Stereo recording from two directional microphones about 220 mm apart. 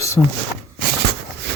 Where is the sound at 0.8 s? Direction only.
45° right (ahead or behind).